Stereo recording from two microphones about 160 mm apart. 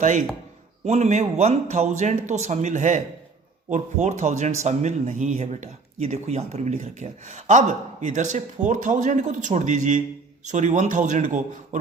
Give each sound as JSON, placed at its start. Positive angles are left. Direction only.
{"t": 0.0, "sound": "speech", "side_deg": -50}